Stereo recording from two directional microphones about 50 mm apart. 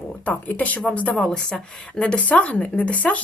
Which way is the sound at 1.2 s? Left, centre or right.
Centre.